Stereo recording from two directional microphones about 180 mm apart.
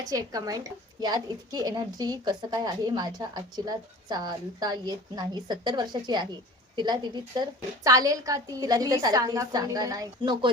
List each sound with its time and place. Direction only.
0.1 s a woman's voice: 20° right (ahead or behind)